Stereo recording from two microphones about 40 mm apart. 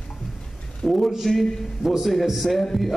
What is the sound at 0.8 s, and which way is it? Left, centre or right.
Speech, centre.